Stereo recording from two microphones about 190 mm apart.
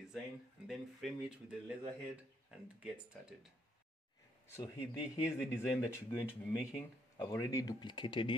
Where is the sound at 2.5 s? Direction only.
5° right (ahead or behind).